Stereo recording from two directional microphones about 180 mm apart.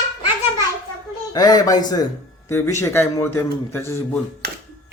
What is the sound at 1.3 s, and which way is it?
A man's voice, 20° left (ahead or behind).